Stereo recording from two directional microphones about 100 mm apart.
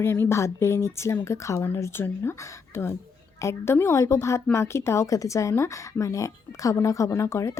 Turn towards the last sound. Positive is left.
turn(degrees=30)  # may be behind; listen again after turning